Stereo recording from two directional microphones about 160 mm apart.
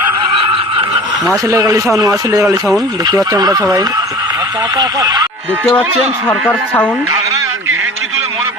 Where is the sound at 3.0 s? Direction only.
20° right (ahead or behind).